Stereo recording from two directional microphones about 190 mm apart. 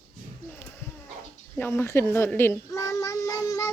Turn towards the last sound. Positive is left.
turn(degrees=15)  # may be behind; listen again after turning